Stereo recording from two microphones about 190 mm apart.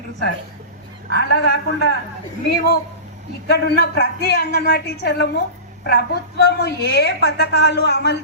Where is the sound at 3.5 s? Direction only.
55° left (ahead or behind).